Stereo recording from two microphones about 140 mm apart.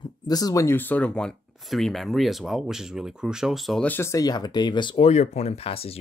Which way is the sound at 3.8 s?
15° left (ahead or behind).